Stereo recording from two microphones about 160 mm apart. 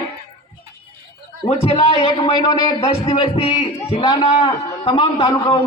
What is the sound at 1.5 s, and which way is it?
Speech, 35° left (ahead or behind).